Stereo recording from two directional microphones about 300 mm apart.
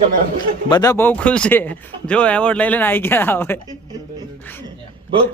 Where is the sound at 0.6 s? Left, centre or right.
Centre.